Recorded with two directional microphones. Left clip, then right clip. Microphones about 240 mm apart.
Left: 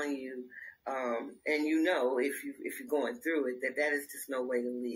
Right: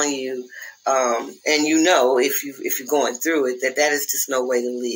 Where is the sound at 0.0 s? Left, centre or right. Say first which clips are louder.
Right 14 dB; right.